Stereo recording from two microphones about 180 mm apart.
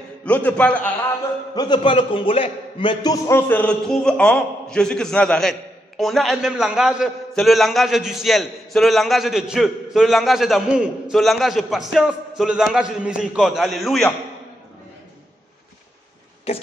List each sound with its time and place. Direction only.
0.2 s a man's voice: 10° left (ahead or behind)
1.5 s a man's voice: 25° left (ahead or behind); by 14.1 s centre (ahead or behind)
16.5 s a sound: 35° left (ahead or behind)